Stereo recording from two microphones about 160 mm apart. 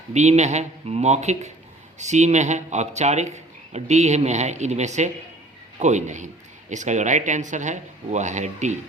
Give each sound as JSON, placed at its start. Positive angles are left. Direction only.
{"t": 0.1, "sound": "speech", "side_deg": -45}